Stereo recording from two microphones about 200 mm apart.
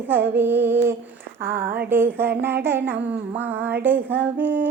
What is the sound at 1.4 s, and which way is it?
Speech, 45° right (ahead or behind).